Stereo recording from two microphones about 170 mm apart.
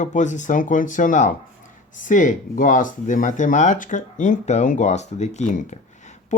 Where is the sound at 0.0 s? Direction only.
45° left (ahead or behind).